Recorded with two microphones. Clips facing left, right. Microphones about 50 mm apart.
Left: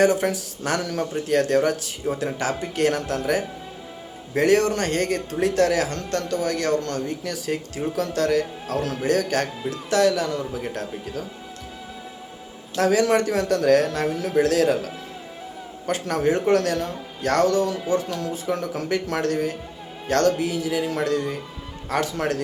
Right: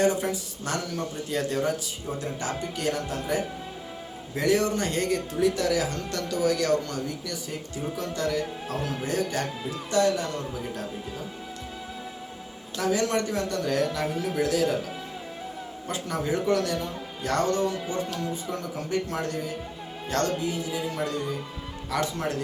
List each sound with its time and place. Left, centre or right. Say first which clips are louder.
0.0 s speech: left 5 dB; left
6.1 s speech: left 2 dB; left
8.8 s speech: left 4 dB; centre
9.0 s a man's voice: left 7 dB; left
10.5 s speech: left 4 dB; left
12.7 s speech: left 6 dB; left
15.9 s speech: left 7 dB; left
18.3 s speech: left 6 dB; left
20.7 s speech: left 6 dB; left